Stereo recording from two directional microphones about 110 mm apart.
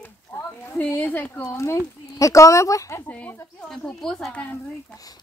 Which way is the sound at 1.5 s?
25° left (ahead or behind).